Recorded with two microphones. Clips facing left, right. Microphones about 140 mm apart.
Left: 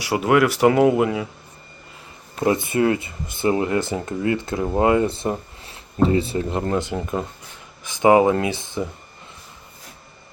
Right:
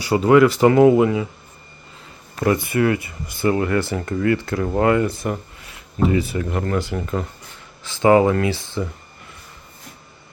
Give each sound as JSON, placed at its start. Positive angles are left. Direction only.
{"t": 0.1, "sound": "speech", "side_deg": 5}
{"t": 2.4, "sound": "speech", "side_deg": 20}